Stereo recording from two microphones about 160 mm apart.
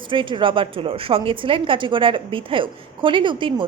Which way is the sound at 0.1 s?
30° right (ahead or behind).